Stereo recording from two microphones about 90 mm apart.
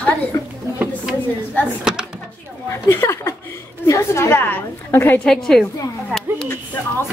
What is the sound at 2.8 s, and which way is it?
A woman's voice, 30° left (ahead or behind).